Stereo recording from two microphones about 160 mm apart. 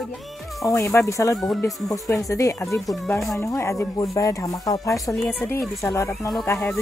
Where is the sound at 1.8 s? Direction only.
20° left (ahead or behind).